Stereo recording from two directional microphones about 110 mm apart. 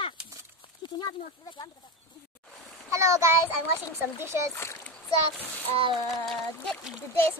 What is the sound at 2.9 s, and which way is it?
Child singing, 25° right (ahead or behind).